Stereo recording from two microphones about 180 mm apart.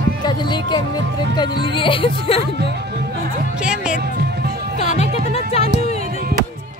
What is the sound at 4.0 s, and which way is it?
Music, 60° right (ahead or behind).